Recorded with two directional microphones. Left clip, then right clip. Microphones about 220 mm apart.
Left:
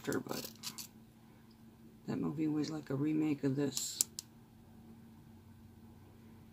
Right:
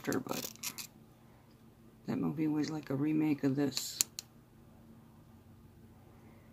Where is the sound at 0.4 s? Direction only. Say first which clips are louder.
Right 3 dB; 20° right (ahead or behind).